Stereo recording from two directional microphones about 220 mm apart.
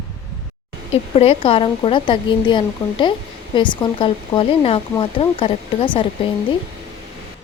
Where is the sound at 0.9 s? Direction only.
25° left (ahead or behind).